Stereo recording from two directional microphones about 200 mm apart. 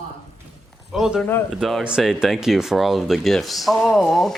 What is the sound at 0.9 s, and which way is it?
Speech, centre (ahead or behind).